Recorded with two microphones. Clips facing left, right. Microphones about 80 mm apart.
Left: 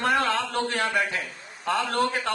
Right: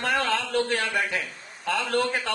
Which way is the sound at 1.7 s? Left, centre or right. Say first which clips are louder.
Left 1 dB; left.